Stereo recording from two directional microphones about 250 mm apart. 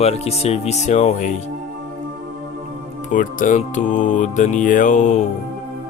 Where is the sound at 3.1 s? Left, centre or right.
Left.